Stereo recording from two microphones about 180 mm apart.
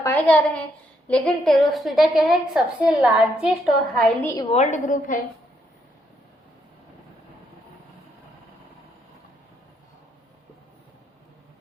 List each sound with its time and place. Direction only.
0.0 s a child's voice: 10° left (ahead or behind)
4.5 s a woman's voice: 40° left (ahead or behind)